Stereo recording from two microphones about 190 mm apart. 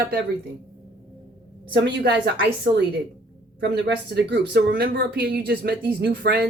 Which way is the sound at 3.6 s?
60° right (ahead or behind).